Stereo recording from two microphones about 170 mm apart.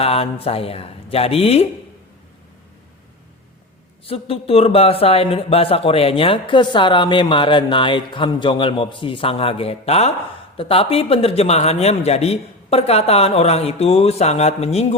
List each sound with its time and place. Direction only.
0.0 s a sound: 35° left (ahead or behind)
0.4 s speech: 35° left (ahead or behind)
4.0 s speech: 35° left (ahead or behind)